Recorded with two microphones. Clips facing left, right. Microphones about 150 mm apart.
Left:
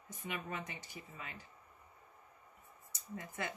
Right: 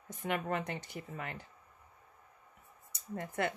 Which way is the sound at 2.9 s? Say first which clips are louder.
Right 6 dB; 60° right (ahead or behind).